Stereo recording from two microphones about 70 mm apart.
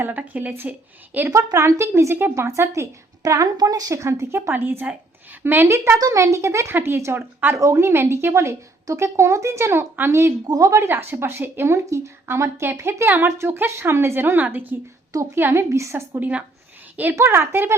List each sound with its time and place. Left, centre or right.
0.0 s a woman's voice: right
1.5 s a woman's voice: right
3.2 s a woman's voice: right
6.0 s a woman's voice: right
6.7 s a woman's voice: right
7.5 s a woman's voice: right
10.4 s a woman's voice: right
10.8 s a woman's voice: right